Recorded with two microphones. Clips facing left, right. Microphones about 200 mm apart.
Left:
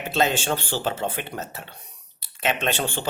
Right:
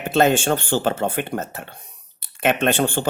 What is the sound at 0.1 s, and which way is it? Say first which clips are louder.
Speech: right 6 dB; 50° right (ahead or behind).